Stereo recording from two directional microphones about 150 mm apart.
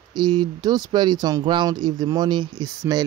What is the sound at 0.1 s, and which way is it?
Speech, 30° right (ahead or behind).